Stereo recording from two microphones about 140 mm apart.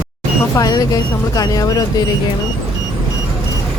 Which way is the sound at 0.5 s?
25° left (ahead or behind).